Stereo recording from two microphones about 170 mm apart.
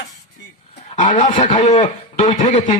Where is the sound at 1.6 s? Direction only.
45° left (ahead or behind).